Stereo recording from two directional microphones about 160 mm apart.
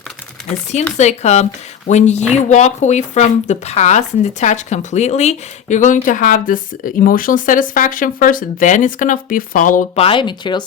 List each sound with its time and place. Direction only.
0.9 s speech: 45° left (ahead or behind)
9.9 s speech: 35° left (ahead or behind)